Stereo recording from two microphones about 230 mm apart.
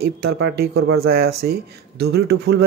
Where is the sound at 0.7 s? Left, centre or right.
Right.